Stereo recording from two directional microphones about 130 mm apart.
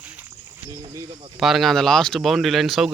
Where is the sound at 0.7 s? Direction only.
30° right (ahead or behind).